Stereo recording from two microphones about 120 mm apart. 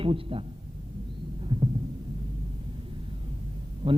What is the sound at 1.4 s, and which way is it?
Heart sounds, 40° right (ahead or behind).